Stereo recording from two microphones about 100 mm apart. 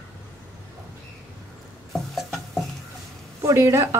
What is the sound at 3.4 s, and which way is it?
Speech, 30° right (ahead or behind).